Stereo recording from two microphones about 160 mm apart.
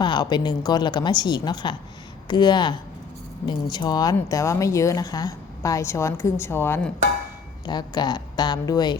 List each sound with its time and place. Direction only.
0.0 s speech: 30° left (ahead or behind)
7.6 s speech: 25° left (ahead or behind)